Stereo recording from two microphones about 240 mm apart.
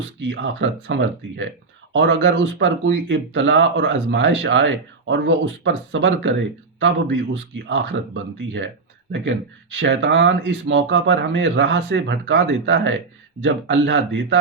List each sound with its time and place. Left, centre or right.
0.2 s speech: right